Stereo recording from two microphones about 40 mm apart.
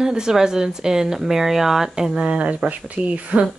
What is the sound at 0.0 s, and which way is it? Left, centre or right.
Speech, centre.